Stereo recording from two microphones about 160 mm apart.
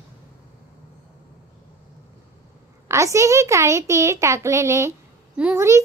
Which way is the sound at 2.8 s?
20° right (ahead or behind).